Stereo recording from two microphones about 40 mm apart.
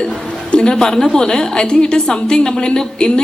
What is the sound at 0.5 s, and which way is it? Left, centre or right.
A woman's voice, centre.